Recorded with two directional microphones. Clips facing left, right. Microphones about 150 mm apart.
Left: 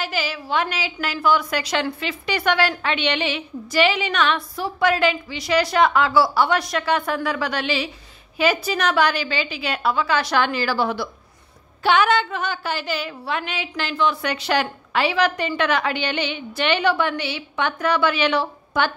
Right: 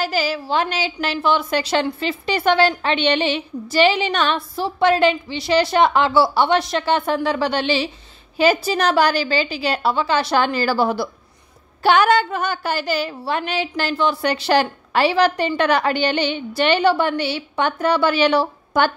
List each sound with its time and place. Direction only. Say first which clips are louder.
0.0 s a woman's voice: right 5 dB; 35° right (ahead or behind)